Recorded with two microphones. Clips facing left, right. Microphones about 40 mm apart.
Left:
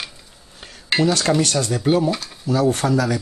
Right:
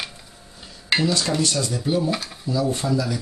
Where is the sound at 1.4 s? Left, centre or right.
Left.